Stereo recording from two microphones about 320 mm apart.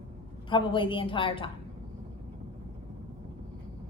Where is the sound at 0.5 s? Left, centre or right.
Centre.